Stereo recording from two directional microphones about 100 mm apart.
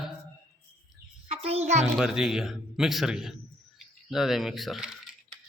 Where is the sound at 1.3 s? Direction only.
90° right.